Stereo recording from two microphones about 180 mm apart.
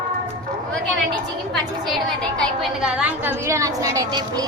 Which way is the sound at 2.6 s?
5° right (ahead or behind).